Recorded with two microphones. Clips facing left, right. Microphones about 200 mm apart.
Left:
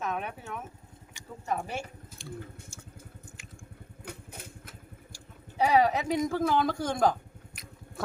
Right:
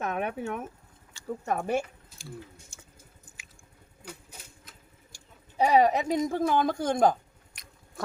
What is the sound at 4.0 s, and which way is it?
Motorcycle, 60° left (ahead or behind).